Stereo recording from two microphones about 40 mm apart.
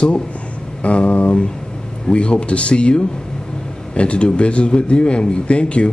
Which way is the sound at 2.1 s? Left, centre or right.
Left.